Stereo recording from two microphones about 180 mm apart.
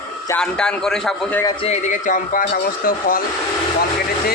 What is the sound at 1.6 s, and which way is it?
A man's voice, 40° left (ahead or behind).